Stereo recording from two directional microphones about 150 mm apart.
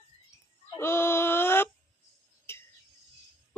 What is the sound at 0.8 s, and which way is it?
Female singing, 15° left (ahead or behind).